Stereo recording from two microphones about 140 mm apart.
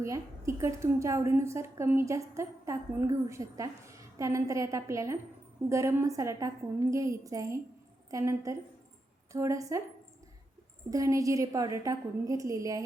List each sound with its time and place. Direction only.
0.0 s a woman's voice: 20° right (ahead or behind)
10.9 s a woman's voice: 25° right (ahead or behind)